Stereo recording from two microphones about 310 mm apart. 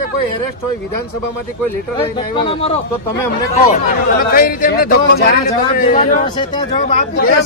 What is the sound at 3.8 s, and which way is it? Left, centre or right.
Speech, left.